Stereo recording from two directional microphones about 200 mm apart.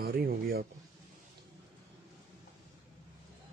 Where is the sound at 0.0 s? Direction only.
45° right (ahead or behind).